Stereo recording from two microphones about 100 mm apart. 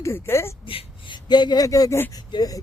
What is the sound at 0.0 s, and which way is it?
Speech, 25° left (ahead or behind).